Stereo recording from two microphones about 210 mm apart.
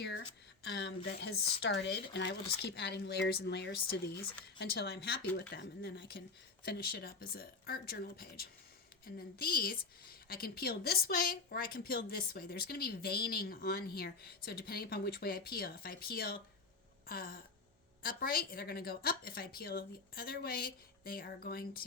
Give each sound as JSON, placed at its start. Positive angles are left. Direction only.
{"t": 0.6, "sound": "a woman's voice", "side_deg": 55}